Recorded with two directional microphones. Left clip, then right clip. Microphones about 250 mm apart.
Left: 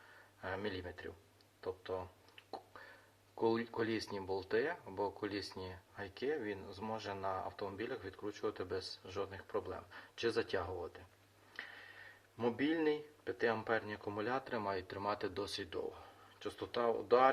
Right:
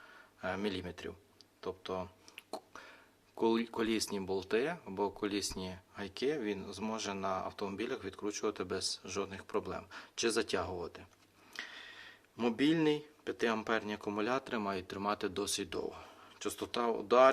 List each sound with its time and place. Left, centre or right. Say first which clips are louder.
0.4 s speech: right 4 dB; right
3.4 s speech: right 3 dB; right
12.4 s speech: right 4 dB; right